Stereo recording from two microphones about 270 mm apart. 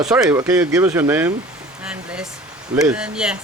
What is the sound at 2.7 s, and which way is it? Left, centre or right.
Speech, centre.